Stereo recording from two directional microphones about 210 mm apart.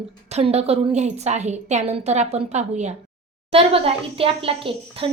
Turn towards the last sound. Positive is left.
turn(degrees=-25)  # may be behind; listen again after turning